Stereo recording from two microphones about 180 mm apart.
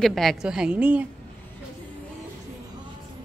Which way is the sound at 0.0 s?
Centre (ahead or behind).